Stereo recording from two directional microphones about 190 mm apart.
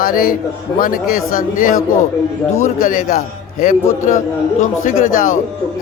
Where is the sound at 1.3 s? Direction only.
45° left (ahead or behind).